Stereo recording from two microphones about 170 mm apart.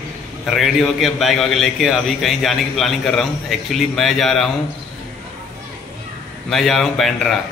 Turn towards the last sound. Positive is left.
turn(degrees=0)  # may be behind; listen again after turning